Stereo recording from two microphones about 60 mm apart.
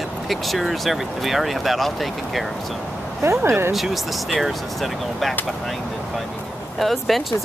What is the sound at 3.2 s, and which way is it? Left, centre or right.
Speech, right.